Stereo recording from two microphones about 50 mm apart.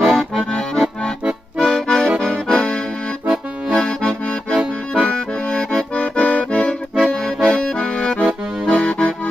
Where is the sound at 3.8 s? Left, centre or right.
Centre.